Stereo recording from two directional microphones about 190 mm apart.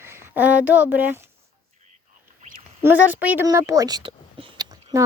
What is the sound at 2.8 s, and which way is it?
A child's voice, 10° right (ahead or behind).